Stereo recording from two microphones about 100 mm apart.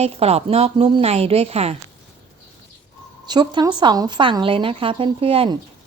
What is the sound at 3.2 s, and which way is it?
A woman's voice, 45° right (ahead or behind).